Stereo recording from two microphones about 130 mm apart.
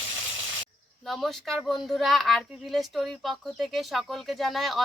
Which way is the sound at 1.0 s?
Centre (ahead or behind).